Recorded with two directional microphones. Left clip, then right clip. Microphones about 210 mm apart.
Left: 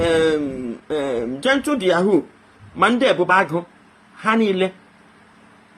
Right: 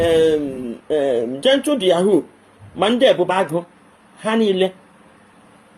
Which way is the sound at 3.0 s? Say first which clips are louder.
Right 3 dB; 35° right (ahead or behind).